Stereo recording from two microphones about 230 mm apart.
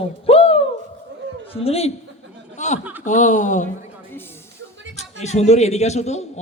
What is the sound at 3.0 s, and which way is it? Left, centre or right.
Speech, left.